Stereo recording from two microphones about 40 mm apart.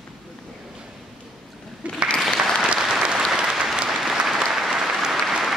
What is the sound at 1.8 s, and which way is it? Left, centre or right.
Applause, right.